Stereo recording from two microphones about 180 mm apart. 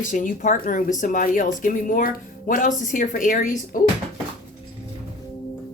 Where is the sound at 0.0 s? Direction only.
45° left (ahead or behind).